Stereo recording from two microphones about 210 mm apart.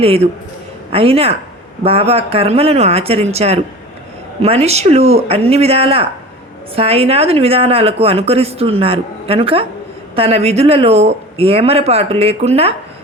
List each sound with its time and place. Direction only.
0.0 s speech: 30° right (ahead or behind)